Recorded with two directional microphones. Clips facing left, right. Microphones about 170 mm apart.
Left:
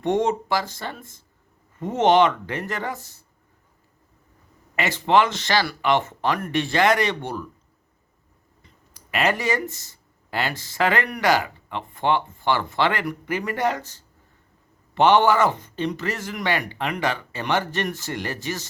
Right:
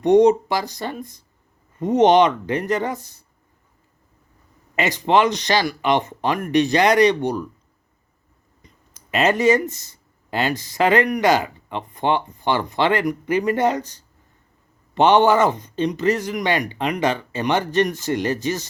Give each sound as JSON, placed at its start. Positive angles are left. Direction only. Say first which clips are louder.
{"t": 0.0, "sound": "speech", "louder": "right 8 dB", "side_deg": -15}
{"t": 4.7, "sound": "speech", "louder": "right 2 dB", "side_deg": -20}
{"t": 8.6, "sound": "speech", "louder": "right 2 dB", "side_deg": -20}